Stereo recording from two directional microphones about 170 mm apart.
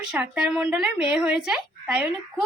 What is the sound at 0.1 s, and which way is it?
Speech, 5° right (ahead or behind).